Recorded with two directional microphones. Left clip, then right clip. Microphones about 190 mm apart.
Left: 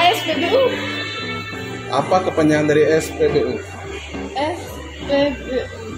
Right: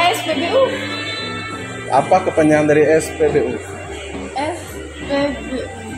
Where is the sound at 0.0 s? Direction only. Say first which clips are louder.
Even; 20° right (ahead or behind).